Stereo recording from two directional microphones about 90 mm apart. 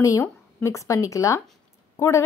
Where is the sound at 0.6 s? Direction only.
35° left (ahead or behind).